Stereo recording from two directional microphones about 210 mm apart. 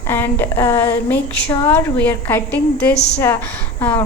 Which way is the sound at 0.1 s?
10° left (ahead or behind).